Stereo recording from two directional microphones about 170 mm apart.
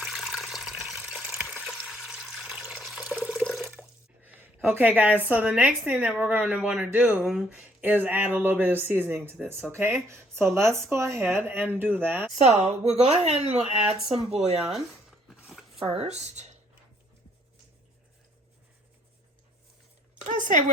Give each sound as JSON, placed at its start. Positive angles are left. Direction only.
{"t": 0.0, "sound": "water", "side_deg": 0}
{"t": 3.7, "sound": "speech", "side_deg": -10}
{"t": 12.4, "sound": "a woman's voice", "side_deg": -40}
{"t": 15.3, "sound": "a sound", "side_deg": 0}
{"t": 15.8, "sound": "a woman's voice", "side_deg": -35}
{"t": 20.2, "sound": "speech", "side_deg": -50}